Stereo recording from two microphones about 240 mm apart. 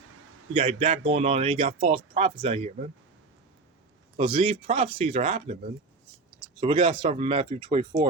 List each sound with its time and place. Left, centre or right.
0.5 s speech: right
4.2 s speech: right